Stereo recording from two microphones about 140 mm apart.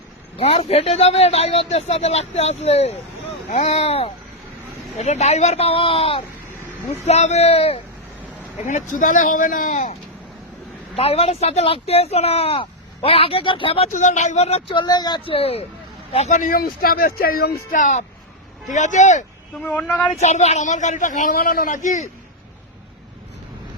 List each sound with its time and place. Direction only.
0.3 s speech: 45° left (ahead or behind)
7.0 s speech: 55° left (ahead or behind)
8.6 s speech: 65° left (ahead or behind)
10.9 s speech: 45° left (ahead or behind)
13.9 s speech: 60° left (ahead or behind)
14.8 s speech: 30° left (ahead or behind); by 15.6 s 45° left (ahead or behind)
16.1 s speech: 60° left (ahead or behind)
19.6 s speech: 10° left (ahead or behind)
20.1 s speech: 55° left (ahead or behind)